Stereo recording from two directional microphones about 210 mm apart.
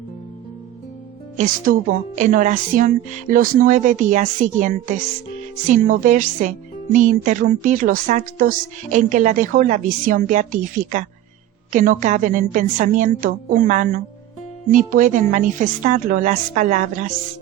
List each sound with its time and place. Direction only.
1.4 s speech: 40° right (ahead or behind)